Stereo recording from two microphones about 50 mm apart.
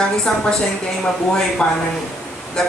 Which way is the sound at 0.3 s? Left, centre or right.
Centre.